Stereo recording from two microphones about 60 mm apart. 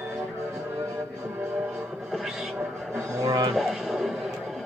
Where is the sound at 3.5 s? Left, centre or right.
Centre.